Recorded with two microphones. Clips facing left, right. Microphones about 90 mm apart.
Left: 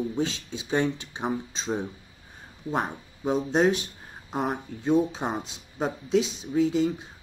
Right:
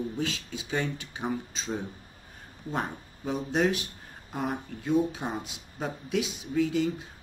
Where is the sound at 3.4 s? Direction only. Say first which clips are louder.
Left 3 dB; 25° left (ahead or behind).